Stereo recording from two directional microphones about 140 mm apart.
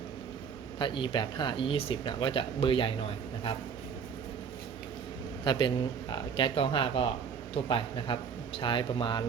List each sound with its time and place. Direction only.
0.8 s speech: 35° left (ahead or behind)
5.5 s speech: 35° left (ahead or behind)